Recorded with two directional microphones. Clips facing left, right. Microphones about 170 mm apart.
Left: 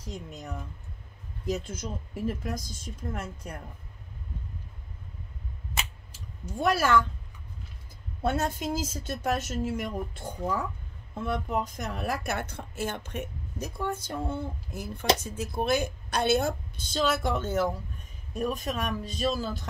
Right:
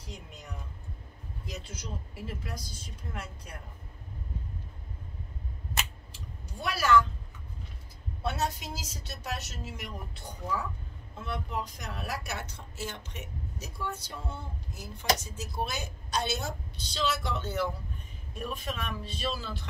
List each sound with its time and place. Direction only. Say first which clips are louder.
0.0 s speech: left 7 dB; 45° left (ahead or behind)
6.1 s speech: left 9 dB; 45° left (ahead or behind)
8.2 s speech: left 4 dB; 50° left (ahead or behind)